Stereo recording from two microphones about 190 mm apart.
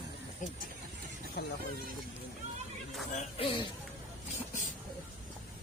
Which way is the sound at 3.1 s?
35° left (ahead or behind).